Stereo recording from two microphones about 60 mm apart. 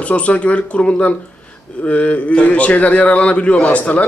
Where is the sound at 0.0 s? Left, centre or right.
Left.